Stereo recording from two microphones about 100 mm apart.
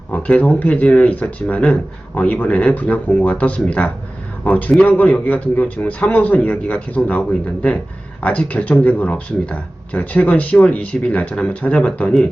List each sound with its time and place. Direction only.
0.1 s speech: 15° left (ahead or behind)